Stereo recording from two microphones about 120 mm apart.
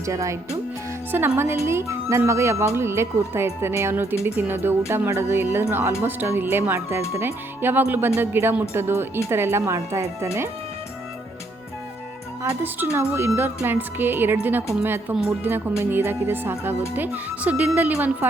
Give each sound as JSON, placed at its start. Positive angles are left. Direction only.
{"t": 0.0, "sound": "speech", "side_deg": -25}
{"t": 12.4, "sound": "speech", "side_deg": -20}